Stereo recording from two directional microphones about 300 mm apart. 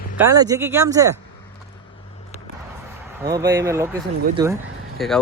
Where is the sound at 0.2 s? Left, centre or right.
Centre.